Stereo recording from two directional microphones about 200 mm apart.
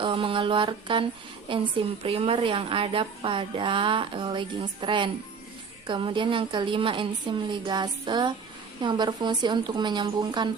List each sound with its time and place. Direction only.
0.0 s a woman's voice: 25° right (ahead or behind)